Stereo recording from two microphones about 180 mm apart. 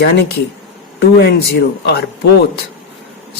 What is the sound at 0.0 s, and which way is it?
Speech, 60° left (ahead or behind).